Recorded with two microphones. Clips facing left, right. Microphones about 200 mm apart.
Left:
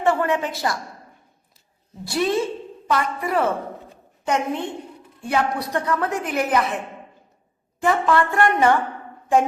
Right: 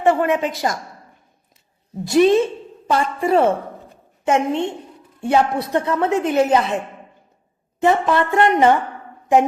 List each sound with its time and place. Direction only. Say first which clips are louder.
0.0 s a woman's voice: right 4 dB; 15° right (ahead or behind)
2.0 s a woman's voice: right 8 dB; 20° right (ahead or behind)
7.8 s a woman's voice: right 2 dB; 20° right (ahead or behind)